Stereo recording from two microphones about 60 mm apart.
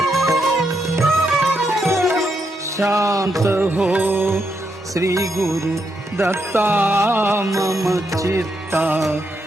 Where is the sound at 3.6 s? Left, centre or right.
Right.